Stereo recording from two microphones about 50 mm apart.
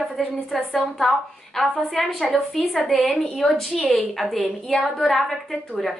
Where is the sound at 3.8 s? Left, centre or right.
Left.